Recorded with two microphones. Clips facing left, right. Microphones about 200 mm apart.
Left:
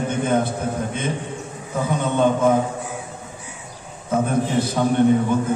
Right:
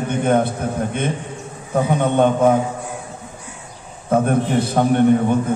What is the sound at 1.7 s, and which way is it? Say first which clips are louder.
Speech: right 5 dB; 60° right (ahead or behind).